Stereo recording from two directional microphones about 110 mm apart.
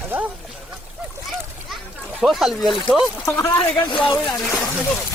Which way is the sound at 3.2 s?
30° left (ahead or behind).